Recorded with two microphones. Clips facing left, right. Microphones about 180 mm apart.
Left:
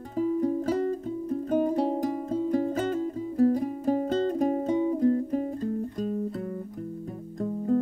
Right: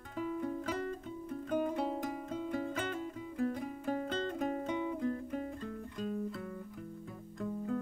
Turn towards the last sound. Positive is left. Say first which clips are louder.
# left 10 dB
turn(degrees=40)  # may be behind; listen again after turning